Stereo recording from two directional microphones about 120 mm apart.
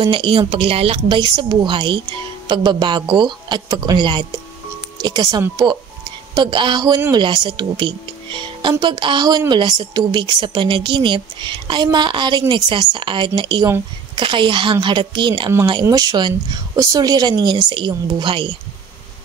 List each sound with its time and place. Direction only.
0.0 s a woman's voice: 45° right (ahead or behind)